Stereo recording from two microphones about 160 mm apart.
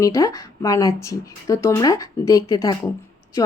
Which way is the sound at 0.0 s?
20° left (ahead or behind).